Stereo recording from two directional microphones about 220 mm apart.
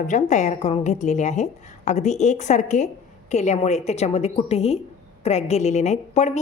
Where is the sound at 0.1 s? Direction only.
35° left (ahead or behind).